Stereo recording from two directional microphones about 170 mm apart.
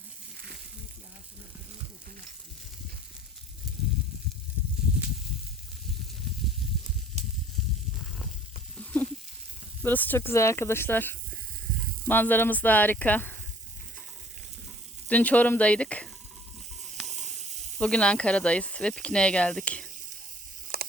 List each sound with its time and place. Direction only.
8.8 s sizzle: 10° left (ahead or behind)
9.8 s speech: 10° left (ahead or behind)
15.1 s speech: 10° left (ahead or behind)
17.1 s snake: 45° right (ahead or behind)
17.7 s speech: 5° left (ahead or behind)
20.7 s a sound: 70° right (ahead or behind)